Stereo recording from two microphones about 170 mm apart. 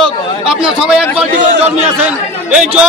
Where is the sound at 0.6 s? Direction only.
5° right (ahead or behind).